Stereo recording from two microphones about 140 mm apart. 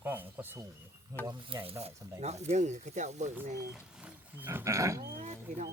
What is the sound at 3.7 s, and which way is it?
Speech, 5° right (ahead or behind).